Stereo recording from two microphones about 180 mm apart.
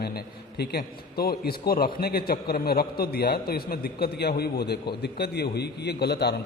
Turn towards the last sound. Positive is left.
turn(degrees=65)  # may be behind; listen again after turning